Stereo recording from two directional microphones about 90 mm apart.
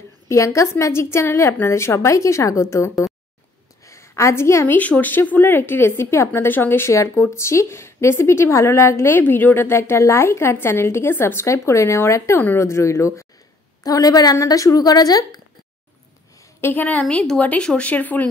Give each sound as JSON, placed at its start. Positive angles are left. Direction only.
{"t": 0.3, "sound": "a woman's voice", "side_deg": 35}
{"t": 3.8, "sound": "a sound", "side_deg": 35}
{"t": 4.7, "sound": "a woman's voice", "side_deg": 15}
{"t": 13.8, "sound": "speech", "side_deg": 45}
{"t": 16.6, "sound": "a woman's voice", "side_deg": 20}